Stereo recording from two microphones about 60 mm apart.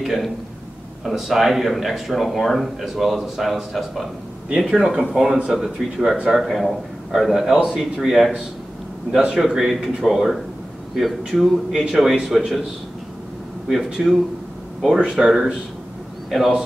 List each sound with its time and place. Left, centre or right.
0.0 s a man's voice: centre
14.0 s a man's voice: centre